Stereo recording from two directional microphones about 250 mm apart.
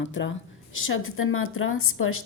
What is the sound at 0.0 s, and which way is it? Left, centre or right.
A woman's voice, left.